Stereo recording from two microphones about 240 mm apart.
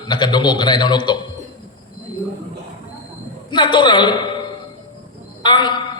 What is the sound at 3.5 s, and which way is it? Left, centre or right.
Speech, centre.